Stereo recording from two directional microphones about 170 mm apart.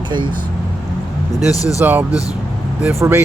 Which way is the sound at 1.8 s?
10° right (ahead or behind).